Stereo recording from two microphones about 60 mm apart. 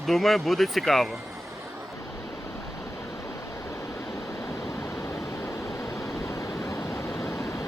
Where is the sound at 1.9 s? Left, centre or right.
Left.